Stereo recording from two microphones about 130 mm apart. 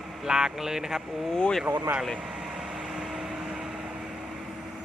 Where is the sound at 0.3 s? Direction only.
5° right (ahead or behind).